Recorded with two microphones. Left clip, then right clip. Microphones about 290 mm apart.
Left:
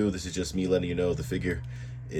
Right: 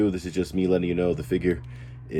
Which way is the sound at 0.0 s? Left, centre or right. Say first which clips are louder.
Right 5 dB; right.